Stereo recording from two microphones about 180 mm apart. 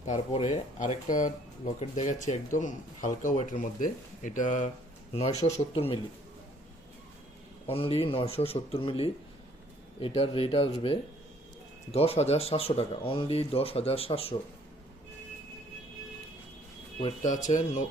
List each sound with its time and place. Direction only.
0.0 s speech: 40° left (ahead or behind)
7.7 s speech: 30° left (ahead or behind)
17.2 s speech: 45° left (ahead or behind)